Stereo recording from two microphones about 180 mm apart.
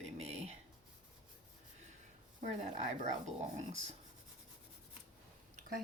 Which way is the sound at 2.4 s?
40° right (ahead or behind).